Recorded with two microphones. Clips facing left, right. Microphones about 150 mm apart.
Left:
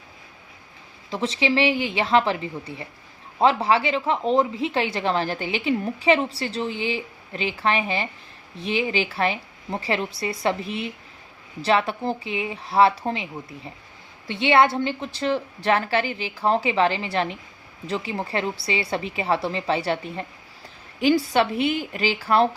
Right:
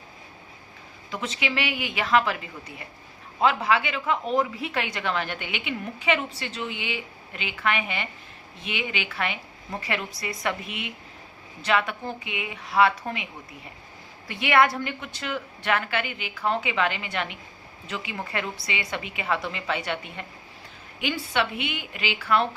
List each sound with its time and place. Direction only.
1.1 s a woman's voice: 30° left (ahead or behind)
14.3 s a woman's voice: 25° left (ahead or behind)